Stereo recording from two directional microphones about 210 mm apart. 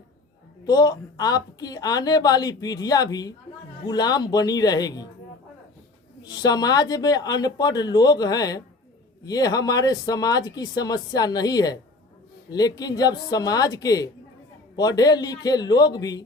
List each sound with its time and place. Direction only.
0.6 s speech: 20° left (ahead or behind)
6.2 s speech: 20° left (ahead or behind)